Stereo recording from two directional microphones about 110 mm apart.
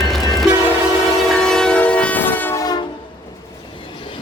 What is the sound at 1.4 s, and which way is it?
Train, 5° left (ahead or behind).